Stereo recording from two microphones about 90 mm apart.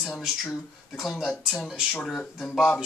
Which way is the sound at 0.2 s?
Centre (ahead or behind).